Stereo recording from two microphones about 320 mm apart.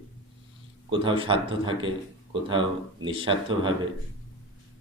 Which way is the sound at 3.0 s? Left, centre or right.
Centre.